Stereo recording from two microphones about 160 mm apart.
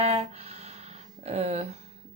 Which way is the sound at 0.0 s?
40° right (ahead or behind).